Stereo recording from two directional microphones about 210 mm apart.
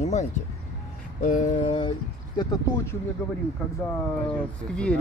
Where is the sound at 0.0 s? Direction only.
30° left (ahead or behind).